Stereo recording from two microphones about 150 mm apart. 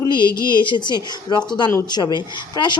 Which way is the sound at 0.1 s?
75° left (ahead or behind).